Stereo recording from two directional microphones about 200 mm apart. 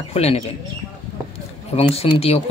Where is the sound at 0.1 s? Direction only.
30° left (ahead or behind).